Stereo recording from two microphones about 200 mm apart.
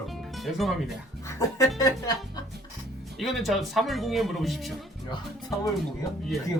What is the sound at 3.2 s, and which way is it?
Speech, centre (ahead or behind).